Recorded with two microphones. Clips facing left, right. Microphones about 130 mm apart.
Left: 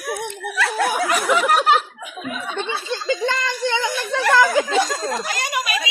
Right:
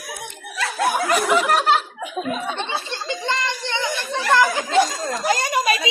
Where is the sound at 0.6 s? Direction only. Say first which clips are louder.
Left 1 dB; 75° left (ahead or behind).